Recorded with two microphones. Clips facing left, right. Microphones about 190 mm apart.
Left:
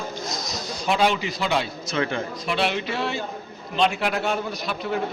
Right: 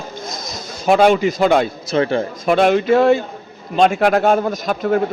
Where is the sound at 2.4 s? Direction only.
50° right (ahead or behind).